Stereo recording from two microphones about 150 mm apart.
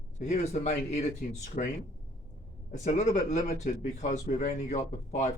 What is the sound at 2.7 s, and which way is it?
Speech, 55° left (ahead or behind).